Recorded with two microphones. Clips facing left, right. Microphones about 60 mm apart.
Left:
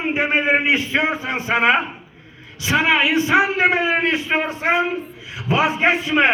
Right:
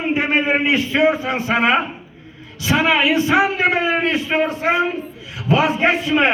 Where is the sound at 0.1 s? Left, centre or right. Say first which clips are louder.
Even; left.